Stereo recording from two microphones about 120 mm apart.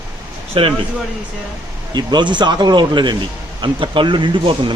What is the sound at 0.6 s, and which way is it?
Speech, 50° right (ahead or behind).